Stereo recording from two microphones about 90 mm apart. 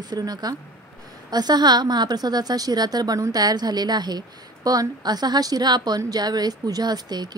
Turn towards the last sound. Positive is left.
turn(degrees=-50)  # may be behind; listen again after turning